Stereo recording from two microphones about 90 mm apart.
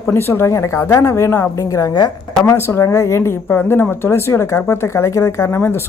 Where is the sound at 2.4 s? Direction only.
30° left (ahead or behind).